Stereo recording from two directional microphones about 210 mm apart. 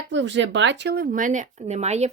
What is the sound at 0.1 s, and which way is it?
Speech, 60° right (ahead or behind).